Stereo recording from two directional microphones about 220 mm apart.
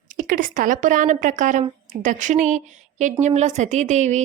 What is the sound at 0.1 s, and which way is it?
Speech, 40° right (ahead or behind).